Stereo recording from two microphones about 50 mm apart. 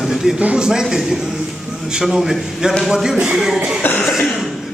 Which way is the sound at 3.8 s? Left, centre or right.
Left.